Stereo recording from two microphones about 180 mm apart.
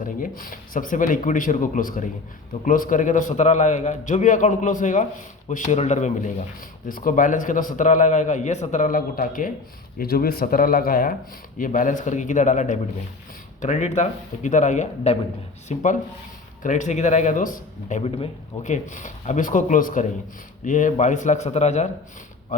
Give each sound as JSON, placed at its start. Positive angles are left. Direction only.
{"t": 0.0, "sound": "a man's voice", "side_deg": 50}